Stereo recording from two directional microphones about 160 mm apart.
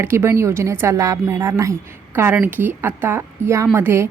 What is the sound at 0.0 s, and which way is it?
A woman's voice, 15° right (ahead or behind).